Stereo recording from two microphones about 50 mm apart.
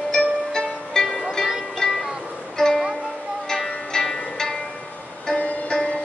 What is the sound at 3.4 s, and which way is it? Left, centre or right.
Zither, centre.